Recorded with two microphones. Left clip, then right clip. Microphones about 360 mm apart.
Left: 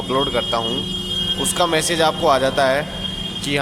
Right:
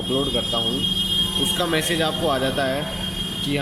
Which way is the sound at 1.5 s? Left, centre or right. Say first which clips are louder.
Left 4 dB; centre.